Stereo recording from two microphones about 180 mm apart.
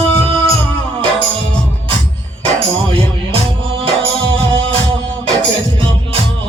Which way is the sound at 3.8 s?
30° right (ahead or behind).